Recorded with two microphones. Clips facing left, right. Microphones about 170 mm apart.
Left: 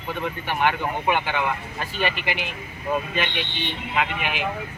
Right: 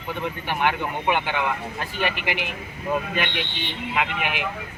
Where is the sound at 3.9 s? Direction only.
15° right (ahead or behind).